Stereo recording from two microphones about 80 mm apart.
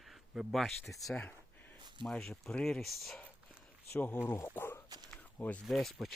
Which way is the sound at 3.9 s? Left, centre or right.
Left.